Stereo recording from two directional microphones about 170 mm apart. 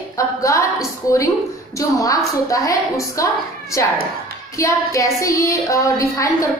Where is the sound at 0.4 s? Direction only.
20° left (ahead or behind).